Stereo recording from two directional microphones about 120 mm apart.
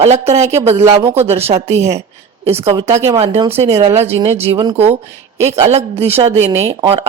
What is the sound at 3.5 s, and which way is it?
Speech, 60° right (ahead or behind).